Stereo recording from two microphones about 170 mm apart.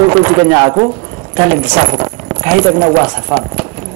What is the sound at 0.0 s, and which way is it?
A woman's voice, 15° right (ahead or behind).